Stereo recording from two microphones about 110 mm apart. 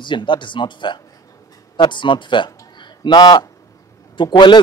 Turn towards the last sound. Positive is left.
turn(degrees=45)  # may be behind; listen again after turning